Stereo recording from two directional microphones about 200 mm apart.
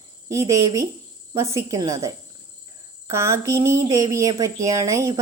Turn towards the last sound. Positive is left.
turn(degrees=-15)  # may be behind; listen again after turning